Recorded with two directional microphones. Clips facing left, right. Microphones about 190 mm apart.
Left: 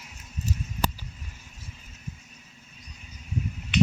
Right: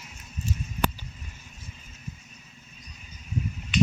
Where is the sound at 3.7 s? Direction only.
65° left (ahead or behind).